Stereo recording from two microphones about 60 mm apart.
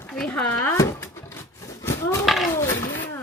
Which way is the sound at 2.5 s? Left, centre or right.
Left.